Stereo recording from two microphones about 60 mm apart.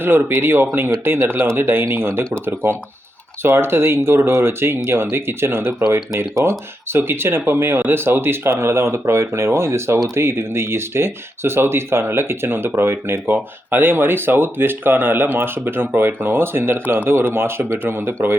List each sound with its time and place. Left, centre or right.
0.0 s speech: right